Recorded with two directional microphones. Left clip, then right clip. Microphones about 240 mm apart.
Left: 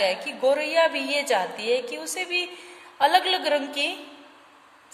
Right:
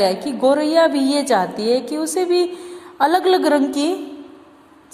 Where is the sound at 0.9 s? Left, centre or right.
Centre.